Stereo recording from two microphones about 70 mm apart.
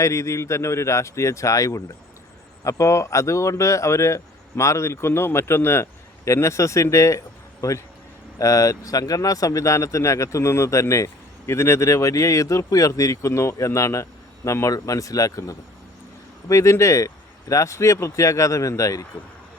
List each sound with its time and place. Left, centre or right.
0.0 s speech: left